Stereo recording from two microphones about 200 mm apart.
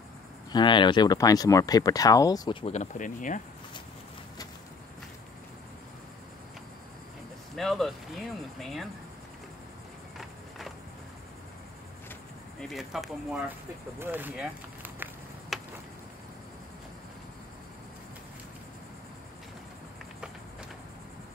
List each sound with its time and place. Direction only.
0.5 s speech: 25° left (ahead or behind)
2.6 s speech: 35° left (ahead or behind)
7.5 s speech: centre (ahead or behind)
12.5 s speech: centre (ahead or behind)
15.5 s insect: centre (ahead or behind)